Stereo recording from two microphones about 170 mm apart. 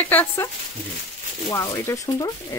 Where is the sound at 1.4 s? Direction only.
20° left (ahead or behind).